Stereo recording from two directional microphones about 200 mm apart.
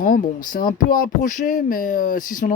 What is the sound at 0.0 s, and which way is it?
Speech, 40° left (ahead or behind).